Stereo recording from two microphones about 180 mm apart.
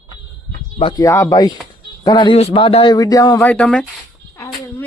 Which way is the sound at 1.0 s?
20° left (ahead or behind).